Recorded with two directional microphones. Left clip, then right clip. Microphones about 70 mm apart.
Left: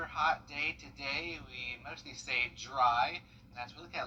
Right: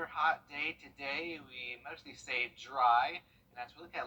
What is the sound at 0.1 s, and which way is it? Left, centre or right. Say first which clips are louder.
Speech: left 1 dB; right.